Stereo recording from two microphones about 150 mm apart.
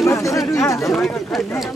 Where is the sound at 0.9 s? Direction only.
Centre (ahead or behind).